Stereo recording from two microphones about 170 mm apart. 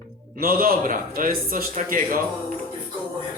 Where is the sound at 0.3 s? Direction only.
60° right (ahead or behind).